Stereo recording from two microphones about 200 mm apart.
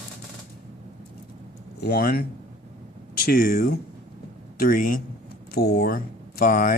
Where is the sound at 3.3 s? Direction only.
45° left (ahead or behind).